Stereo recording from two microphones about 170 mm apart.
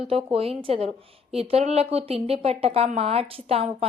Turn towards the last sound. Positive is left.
turn(degrees=-35)  # may be behind; listen again after turning